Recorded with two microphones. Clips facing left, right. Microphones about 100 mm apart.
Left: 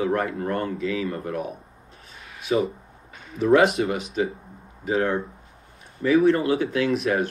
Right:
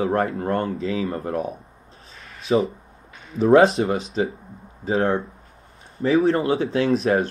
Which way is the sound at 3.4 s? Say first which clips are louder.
Right 3 dB; 30° right (ahead or behind).